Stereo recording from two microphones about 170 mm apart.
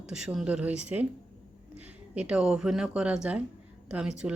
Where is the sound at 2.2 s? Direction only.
5° right (ahead or behind).